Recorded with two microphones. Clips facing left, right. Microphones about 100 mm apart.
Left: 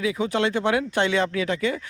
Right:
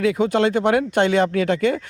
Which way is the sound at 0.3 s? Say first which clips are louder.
Right 3 dB; 50° right (ahead or behind).